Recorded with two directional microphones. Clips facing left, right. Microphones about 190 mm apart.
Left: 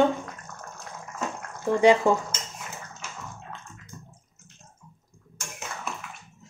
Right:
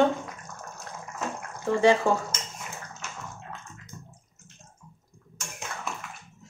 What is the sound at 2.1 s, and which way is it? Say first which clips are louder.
Speech: left 2 dB; 15° left (ahead or behind).